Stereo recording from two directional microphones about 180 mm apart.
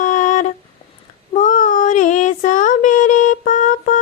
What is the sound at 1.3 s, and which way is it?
Child singing, 45° left (ahead or behind).